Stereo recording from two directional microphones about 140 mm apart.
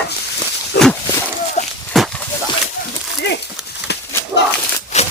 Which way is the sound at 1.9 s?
5° left (ahead or behind).